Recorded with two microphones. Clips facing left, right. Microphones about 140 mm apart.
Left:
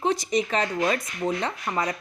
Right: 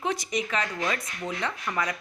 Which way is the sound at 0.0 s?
30° left (ahead or behind).